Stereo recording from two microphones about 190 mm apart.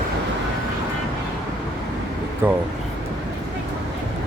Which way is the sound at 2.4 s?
10° right (ahead or behind).